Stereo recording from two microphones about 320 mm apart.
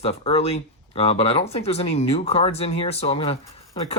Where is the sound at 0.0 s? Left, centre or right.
Centre.